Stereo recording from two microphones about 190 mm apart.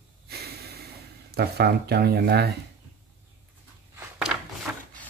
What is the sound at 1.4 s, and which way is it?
Speech, 55° right (ahead or behind).